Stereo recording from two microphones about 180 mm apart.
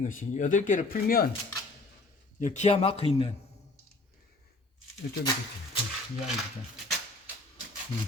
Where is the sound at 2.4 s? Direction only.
40° left (ahead or behind).